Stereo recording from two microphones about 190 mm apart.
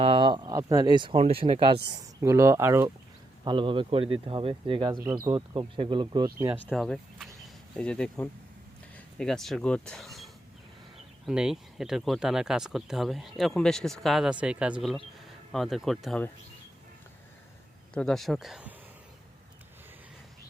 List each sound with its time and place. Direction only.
0.0 s speech: 25° right (ahead or behind)
1.9 s speech: 15° right (ahead or behind)
3.4 s speech: 25° right (ahead or behind)
5.3 s speech: 30° right (ahead or behind)
6.5 s speech: centre (ahead or behind)
11.3 s speech: 5° right (ahead or behind)
17.9 s speech: centre (ahead or behind)